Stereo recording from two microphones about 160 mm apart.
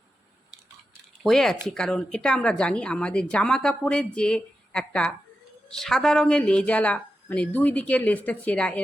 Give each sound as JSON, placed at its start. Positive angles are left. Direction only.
{"t": 1.2, "sound": "speech", "side_deg": 5}